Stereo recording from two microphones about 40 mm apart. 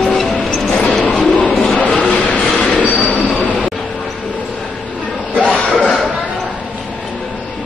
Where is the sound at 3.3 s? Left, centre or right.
Left.